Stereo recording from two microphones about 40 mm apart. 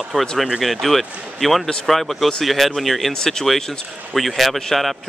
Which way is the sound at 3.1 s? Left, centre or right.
Centre.